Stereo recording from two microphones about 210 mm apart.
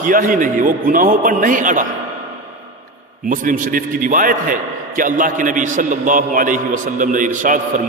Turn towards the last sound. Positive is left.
turn(degrees=-40)  # may be behind; listen again after turning